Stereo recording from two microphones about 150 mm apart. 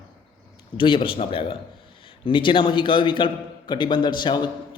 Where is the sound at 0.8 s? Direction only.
35° left (ahead or behind).